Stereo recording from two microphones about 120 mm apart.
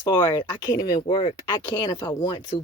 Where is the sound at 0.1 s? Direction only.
40° left (ahead or behind).